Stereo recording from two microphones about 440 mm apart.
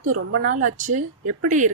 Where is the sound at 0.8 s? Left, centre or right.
Centre.